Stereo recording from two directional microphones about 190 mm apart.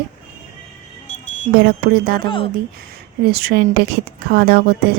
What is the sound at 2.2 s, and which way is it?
Speech, 25° left (ahead or behind).